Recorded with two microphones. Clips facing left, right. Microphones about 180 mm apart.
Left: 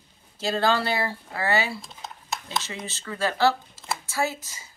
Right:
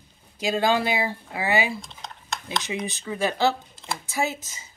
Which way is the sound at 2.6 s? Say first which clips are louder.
Right 6 dB; 15° right (ahead or behind).